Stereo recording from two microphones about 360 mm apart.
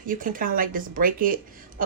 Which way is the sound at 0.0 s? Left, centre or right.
Right.